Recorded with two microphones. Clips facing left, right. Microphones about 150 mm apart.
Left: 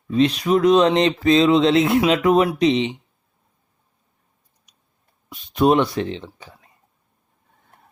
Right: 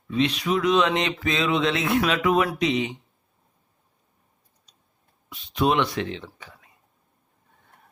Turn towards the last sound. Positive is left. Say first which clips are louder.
# left 4 dB
turn(degrees=30)  # may be behind; listen again after turning